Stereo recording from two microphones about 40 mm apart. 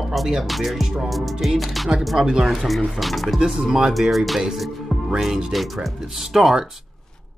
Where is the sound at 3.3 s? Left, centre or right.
Centre.